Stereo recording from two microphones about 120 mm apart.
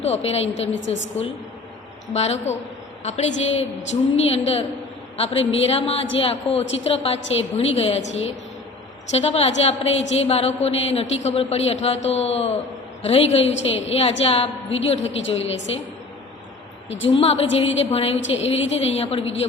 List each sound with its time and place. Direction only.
0.0 s a woman's voice: 60° left (ahead or behind)
4.2 s a woman's voice: 55° left (ahead or behind)
17.1 s a woman's voice: 50° left (ahead or behind)